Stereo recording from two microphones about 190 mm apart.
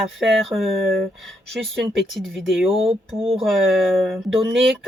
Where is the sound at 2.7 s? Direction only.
30° right (ahead or behind).